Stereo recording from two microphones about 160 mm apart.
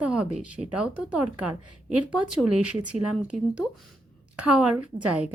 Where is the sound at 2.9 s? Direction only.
50° right (ahead or behind).